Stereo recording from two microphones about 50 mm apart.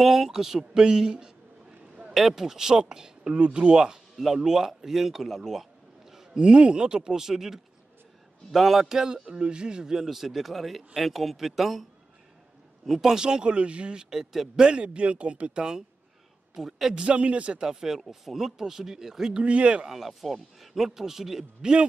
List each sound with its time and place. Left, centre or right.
0.0 s speech: centre
12.8 s speech: centre
14.1 s speech: centre
14.7 s speech: right
16.5 s speech: centre
16.9 s speech: right
19.4 s speech: right
19.9 s speech: centre